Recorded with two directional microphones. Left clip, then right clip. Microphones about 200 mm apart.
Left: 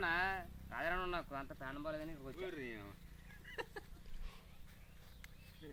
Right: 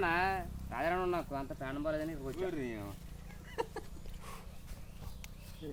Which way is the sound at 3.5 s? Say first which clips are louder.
Right 8 dB; 50° right (ahead or behind).